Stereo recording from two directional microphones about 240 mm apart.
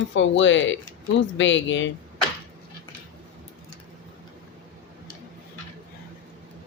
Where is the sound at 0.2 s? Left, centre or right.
Left.